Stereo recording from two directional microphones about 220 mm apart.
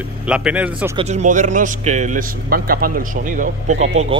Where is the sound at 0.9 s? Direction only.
30° right (ahead or behind).